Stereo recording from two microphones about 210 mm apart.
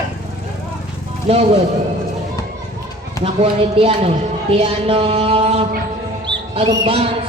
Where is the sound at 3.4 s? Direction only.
25° right (ahead or behind).